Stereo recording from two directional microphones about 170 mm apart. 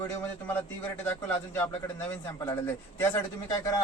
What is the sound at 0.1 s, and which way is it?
A man's voice, 10° left (ahead or behind).